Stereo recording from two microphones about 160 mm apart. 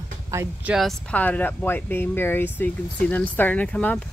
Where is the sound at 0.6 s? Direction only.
Centre (ahead or behind).